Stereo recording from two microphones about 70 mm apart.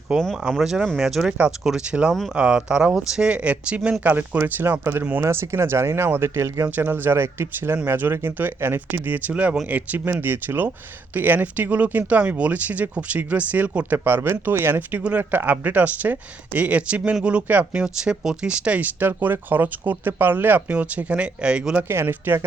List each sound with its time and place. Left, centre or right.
0.2 s speech: centre
0.6 s speech: centre
4.0 s speech: right
10.1 s speech: right; by 21.8 s centre
21.8 s speech: right